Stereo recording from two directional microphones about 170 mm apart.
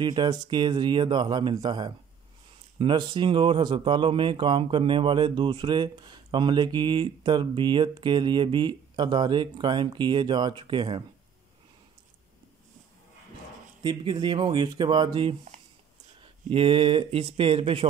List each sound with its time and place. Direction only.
0.0 s speech: 25° right (ahead or behind)
13.8 s speech: 25° right (ahead or behind)